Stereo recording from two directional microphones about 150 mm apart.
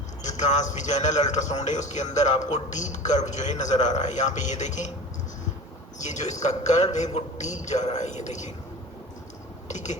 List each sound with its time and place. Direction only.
0.2 s a man's voice: 50° left (ahead or behind)
6.0 s a man's voice: 50° left (ahead or behind)
9.6 s speech: 50° left (ahead or behind)